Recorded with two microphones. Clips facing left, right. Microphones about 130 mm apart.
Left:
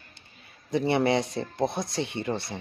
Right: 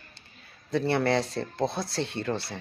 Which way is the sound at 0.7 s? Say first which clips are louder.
Left 1 dB; 15° left (ahead or behind).